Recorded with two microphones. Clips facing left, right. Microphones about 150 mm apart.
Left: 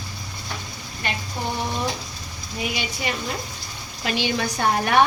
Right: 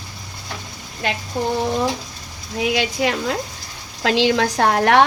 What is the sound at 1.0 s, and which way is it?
Speech, 90° right.